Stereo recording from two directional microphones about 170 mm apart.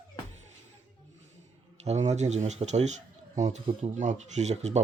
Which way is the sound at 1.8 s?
40° right (ahead or behind).